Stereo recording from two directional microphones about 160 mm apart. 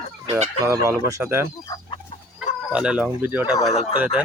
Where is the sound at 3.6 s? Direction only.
40° left (ahead or behind).